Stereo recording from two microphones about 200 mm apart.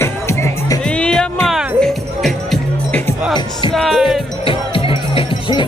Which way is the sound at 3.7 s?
Centre (ahead or behind).